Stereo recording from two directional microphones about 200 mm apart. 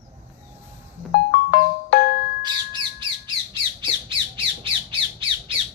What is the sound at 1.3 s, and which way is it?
Music, 50° left (ahead or behind).